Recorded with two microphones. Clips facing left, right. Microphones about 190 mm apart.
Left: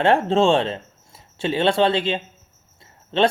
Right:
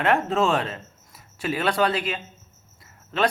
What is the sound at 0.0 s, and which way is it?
Speech, 30° left (ahead or behind).